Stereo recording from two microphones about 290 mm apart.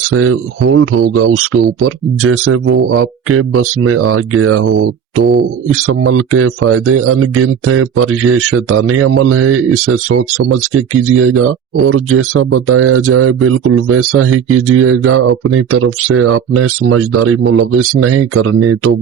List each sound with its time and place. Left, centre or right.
0.1 s speech: right